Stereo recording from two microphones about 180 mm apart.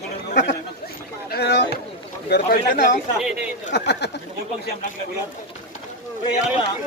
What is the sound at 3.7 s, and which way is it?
Speech, 70° left (ahead or behind).